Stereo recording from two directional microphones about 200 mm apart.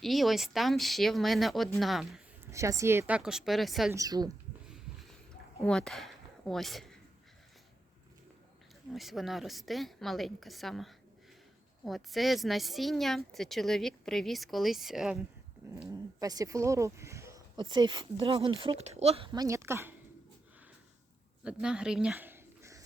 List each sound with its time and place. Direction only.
0.0 s speech: centre (ahead or behind)
2.5 s speech: 15° right (ahead or behind)
3.9 s speech: 20° right (ahead or behind)
4.7 s a sound: centre (ahead or behind)
5.6 s speech: 5° left (ahead or behind)
8.9 s speech: centre (ahead or behind)
15.9 s speech: 20° right (ahead or behind)
21.4 s speech: 5° right (ahead or behind)